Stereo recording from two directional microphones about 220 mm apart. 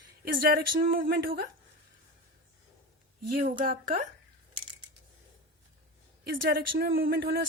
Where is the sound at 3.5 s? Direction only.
40° right (ahead or behind).